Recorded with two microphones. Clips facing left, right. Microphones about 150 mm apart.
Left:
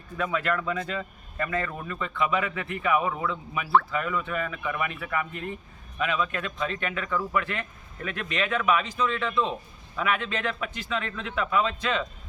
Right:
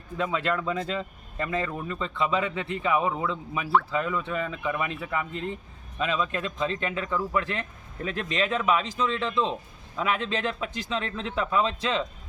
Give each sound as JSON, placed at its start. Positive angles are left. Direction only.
{"t": 0.2, "sound": "a man's voice", "side_deg": -25}